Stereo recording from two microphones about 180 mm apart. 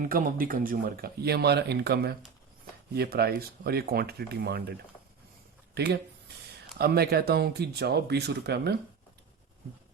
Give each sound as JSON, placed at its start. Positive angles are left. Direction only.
{"t": 0.0, "sound": "speech", "side_deg": -50}